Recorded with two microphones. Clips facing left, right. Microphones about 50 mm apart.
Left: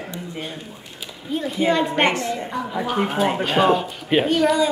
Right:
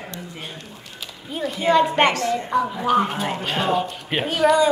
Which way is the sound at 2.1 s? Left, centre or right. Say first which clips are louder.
Right 1 dB; left.